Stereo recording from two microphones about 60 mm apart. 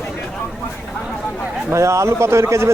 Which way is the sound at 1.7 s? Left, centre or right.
Right.